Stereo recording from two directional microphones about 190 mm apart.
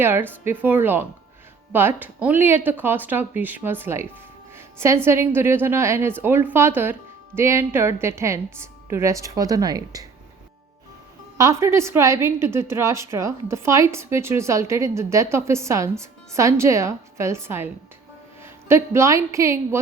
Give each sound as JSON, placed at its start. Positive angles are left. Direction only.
{"t": 0.0, "sound": "a woman's voice", "side_deg": -10}
{"t": 4.5, "sound": "music", "side_deg": -15}
{"t": 5.0, "sound": "a woman's voice", "side_deg": -10}
{"t": 11.3, "sound": "a woman's voice", "side_deg": -15}